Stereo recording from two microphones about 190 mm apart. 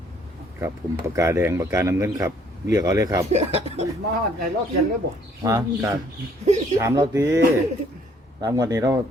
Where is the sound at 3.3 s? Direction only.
35° right (ahead or behind).